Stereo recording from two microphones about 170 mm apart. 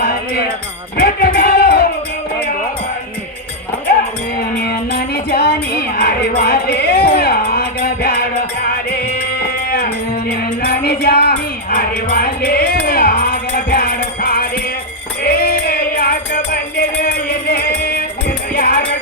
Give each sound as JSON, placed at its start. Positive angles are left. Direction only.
{"t": 0.0, "sound": "music", "side_deg": 65}
{"t": 0.9, "sound": "sheep", "side_deg": 65}
{"t": 4.5, "sound": "music", "side_deg": 70}